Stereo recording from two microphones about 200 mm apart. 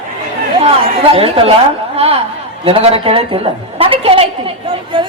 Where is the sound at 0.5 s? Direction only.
30° right (ahead or behind).